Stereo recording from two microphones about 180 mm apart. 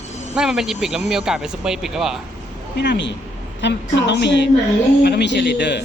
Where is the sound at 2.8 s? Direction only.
75° left (ahead or behind).